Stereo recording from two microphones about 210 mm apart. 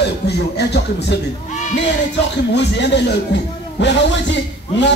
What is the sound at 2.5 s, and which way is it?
Speech, 55° left (ahead or behind).